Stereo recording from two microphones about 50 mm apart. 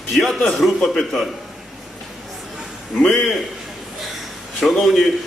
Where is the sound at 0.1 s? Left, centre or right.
Centre.